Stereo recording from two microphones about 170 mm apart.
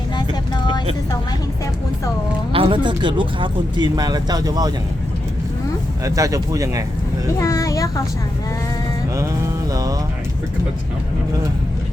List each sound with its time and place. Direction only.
0.2 s vehicle: 25° left (ahead or behind)
2.5 s speech: 35° right (ahead or behind)
6.1 s speech: 20° right (ahead or behind)
7.3 s a sound: 15° left (ahead or behind)